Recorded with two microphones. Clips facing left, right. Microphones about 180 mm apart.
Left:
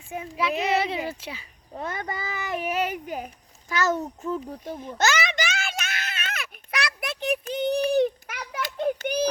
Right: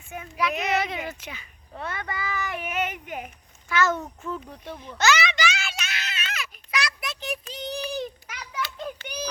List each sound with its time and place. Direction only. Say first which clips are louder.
0.1 s a child's voice: left 1 dB; 30° left (ahead or behind)
1.8 s speech: left 2 dB; 40° left (ahead or behind)
2.2 s a child's voice: left 2 dB; 25° left (ahead or behind)
4.2 s a sound: left 4 dB; 35° left (ahead or behind); by 9.2 s 55° left (ahead or behind)